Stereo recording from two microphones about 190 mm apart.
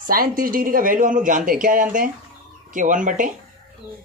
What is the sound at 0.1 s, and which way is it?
Speech, 50° right (ahead or behind).